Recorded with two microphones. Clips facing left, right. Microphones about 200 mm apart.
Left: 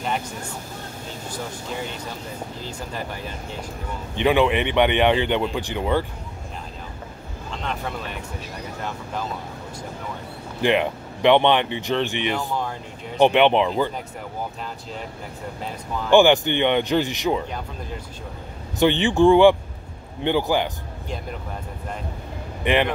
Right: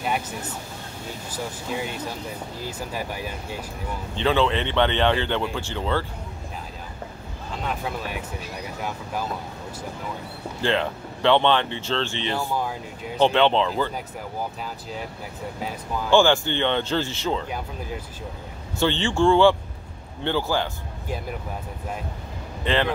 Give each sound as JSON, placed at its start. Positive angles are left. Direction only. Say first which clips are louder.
{"t": 2.6, "sound": "speech", "louder": "right 4 dB", "side_deg": -10}
{"t": 4.1, "sound": "speech", "louder": "left 3 dB", "side_deg": 15}
{"t": 7.6, "sound": "speech", "louder": "even", "side_deg": -10}
{"t": 10.6, "sound": "speech", "louder": "left 4 dB", "side_deg": 15}
{"t": 12.4, "sound": "speech", "louder": "even", "side_deg": -5}
{"t": 13.2, "sound": "speech", "louder": "left 3 dB", "side_deg": 15}
{"t": 14.6, "sound": "speech", "louder": "even", "side_deg": -5}
{"t": 16.1, "sound": "speech", "louder": "left 3 dB", "side_deg": 15}
{"t": 18.8, "sound": "speech", "louder": "left 4 dB", "side_deg": 15}
{"t": 22.6, "sound": "speech", "louder": "left 3 dB", "side_deg": 15}